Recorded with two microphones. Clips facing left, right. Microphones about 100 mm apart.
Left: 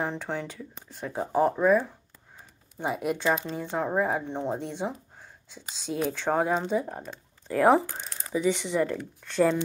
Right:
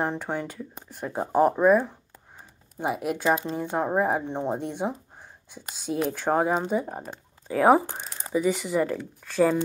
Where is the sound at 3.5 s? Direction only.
15° right (ahead or behind).